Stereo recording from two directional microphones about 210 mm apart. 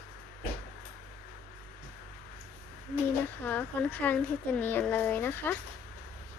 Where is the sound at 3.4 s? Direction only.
5° left (ahead or behind).